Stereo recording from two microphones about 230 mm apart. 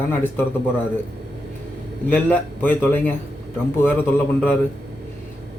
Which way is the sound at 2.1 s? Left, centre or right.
Centre.